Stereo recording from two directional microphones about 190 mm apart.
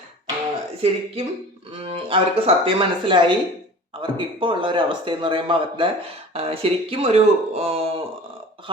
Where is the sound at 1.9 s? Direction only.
30° right (ahead or behind).